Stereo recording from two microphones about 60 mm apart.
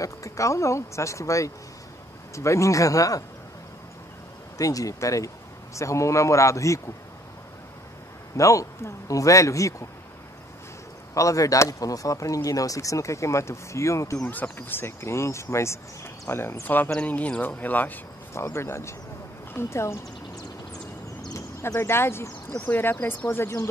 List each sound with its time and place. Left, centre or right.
0.0 s speech: left
4.6 s speech: left
8.4 s speech: left
11.1 s speech: left
14.3 s speech: left
18.3 s speech: left
21.3 s a sound: left
21.7 s speech: left